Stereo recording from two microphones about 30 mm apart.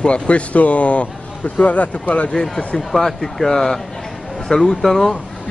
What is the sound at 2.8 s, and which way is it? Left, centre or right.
Speech, centre.